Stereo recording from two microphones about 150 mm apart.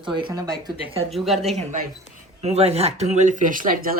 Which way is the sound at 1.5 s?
50° right (ahead or behind).